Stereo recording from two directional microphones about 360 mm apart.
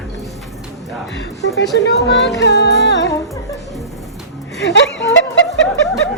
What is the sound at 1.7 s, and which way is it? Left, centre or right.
Music, left.